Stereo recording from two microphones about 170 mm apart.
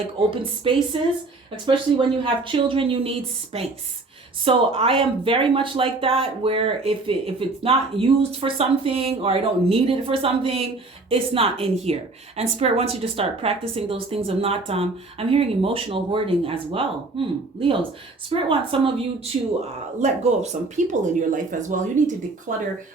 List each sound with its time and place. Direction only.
0.3 s speech: 30° right (ahead or behind)
20.0 s speech: 40° right (ahead or behind)